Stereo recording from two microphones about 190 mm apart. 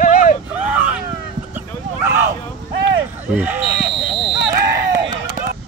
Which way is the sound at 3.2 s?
10° right (ahead or behind).